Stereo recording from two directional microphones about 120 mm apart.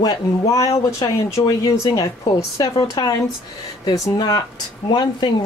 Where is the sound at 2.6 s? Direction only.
30° left (ahead or behind).